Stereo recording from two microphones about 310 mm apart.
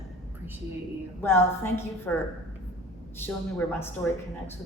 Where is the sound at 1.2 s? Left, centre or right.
Centre.